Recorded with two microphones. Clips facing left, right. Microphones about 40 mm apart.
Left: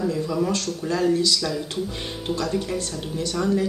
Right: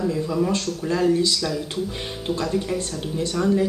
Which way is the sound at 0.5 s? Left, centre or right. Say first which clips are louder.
Right 1 dB; centre.